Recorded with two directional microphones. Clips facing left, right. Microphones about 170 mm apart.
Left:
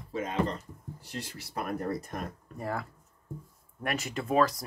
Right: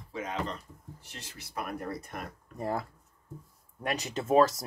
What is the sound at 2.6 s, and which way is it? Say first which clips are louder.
Speech: right 2 dB; 20° right (ahead or behind).